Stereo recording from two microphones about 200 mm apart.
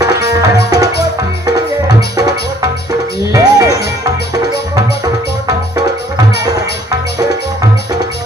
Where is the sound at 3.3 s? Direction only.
15° right (ahead or behind).